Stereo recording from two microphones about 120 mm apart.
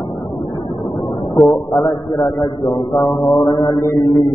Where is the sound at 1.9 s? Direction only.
40° left (ahead or behind).